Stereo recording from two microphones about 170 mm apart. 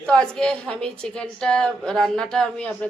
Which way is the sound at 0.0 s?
5° left (ahead or behind).